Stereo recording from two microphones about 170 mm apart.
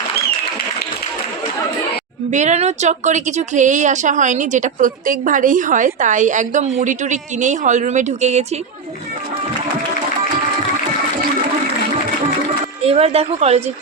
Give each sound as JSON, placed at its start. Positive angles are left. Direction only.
{"t": 2.3, "sound": "a woman's voice", "side_deg": -45}
{"t": 12.8, "sound": "a woman's voice", "side_deg": -35}